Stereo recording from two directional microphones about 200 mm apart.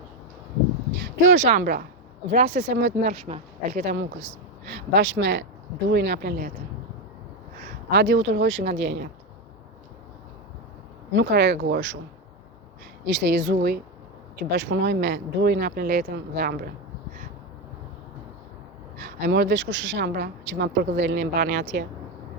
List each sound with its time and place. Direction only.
1.3 s speech: 40° right (ahead or behind)
2.6 s a woman's voice: 65° right (ahead or behind)
3.2 s speech: 30° right (ahead or behind)
3.8 s a woman's voice: 55° right (ahead or behind)
7.9 s a woman's voice: 60° right (ahead or behind)
11.1 s a woman's voice: 60° right (ahead or behind)
13.1 s a woman's voice: 60° right (ahead or behind)
14.3 s a woman's voice: 65° right (ahead or behind)
18.9 s a woman's voice: 55° right (ahead or behind)